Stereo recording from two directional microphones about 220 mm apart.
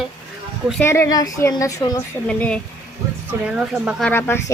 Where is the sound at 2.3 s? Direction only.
5° left (ahead or behind).